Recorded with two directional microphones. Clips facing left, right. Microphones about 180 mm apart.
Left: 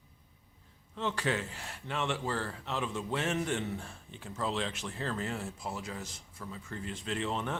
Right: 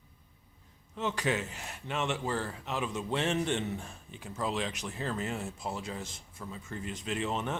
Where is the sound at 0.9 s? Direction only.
15° right (ahead or behind).